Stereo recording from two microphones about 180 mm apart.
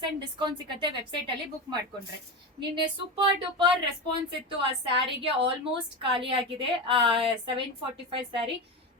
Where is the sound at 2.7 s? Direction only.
25° right (ahead or behind).